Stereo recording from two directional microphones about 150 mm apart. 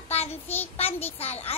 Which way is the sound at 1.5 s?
40° left (ahead or behind).